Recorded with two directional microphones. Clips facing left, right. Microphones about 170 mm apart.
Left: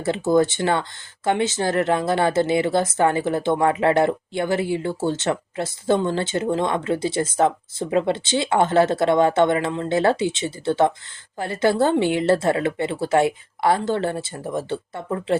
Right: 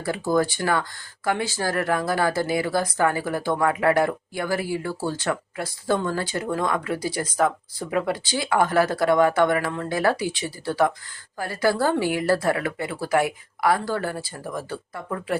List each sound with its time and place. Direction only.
0.0 s speech: 25° left (ahead or behind)